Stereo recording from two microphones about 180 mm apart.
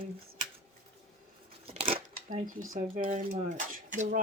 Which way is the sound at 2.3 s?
45° right (ahead or behind).